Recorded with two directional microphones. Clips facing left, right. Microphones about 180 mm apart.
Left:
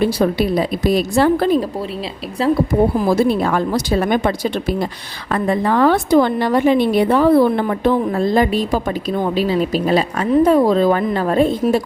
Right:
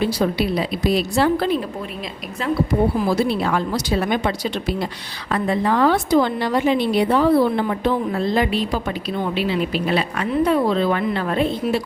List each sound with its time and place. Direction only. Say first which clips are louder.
0.0 s a woman's voice: left 4 dB; 50° left (ahead or behind)
3.1 s a woman's voice: left 4 dB; 45° left (ahead or behind)